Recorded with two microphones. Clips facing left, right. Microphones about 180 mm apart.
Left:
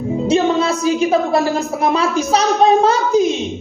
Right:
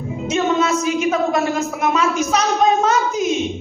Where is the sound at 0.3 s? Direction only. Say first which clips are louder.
Left 2 dB; 30° left (ahead or behind).